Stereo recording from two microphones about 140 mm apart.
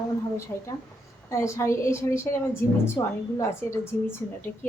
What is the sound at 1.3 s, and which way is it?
A woman's voice, 20° left (ahead or behind).